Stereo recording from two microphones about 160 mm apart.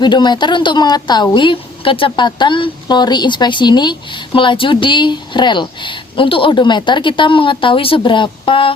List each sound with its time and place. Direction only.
0.0 s a woman's voice: 30° left (ahead or behind)